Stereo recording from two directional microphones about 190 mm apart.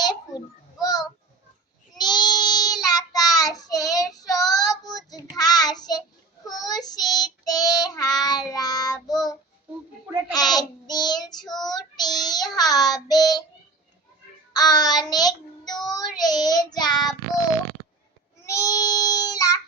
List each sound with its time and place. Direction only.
0.8 s child singing: 20° left (ahead or behind)
10.3 s child singing: 20° left (ahead or behind)
14.5 s child singing: 20° left (ahead or behind)
18.4 s child singing: 15° left (ahead or behind)